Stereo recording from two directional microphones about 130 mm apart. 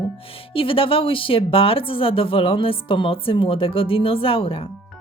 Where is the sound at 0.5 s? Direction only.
45° left (ahead or behind).